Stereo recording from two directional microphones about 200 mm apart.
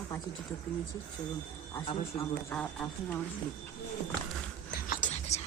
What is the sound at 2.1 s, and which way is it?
Speech, 5° left (ahead or behind).